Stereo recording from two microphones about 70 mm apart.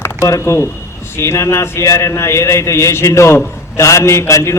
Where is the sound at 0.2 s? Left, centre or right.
Left.